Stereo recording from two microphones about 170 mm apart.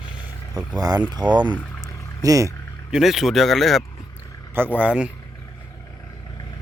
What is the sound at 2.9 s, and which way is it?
Speech, centre (ahead or behind).